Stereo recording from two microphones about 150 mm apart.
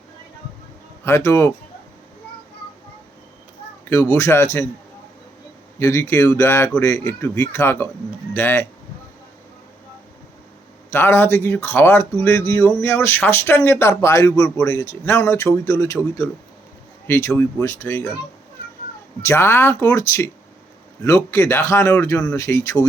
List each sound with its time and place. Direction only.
1.0 s speech: 20° left (ahead or behind)
3.8 s speech: 15° left (ahead or behind)
5.8 s speech: 20° left (ahead or behind)
10.9 s a man's voice: 15° left (ahead or behind)
17.1 s speech: 15° left (ahead or behind)
19.2 s a man's voice: 15° left (ahead or behind)